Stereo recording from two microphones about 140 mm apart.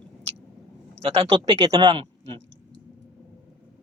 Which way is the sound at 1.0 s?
40° right (ahead or behind).